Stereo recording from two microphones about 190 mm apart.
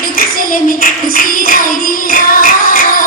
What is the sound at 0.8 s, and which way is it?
Music, 50° left (ahead or behind).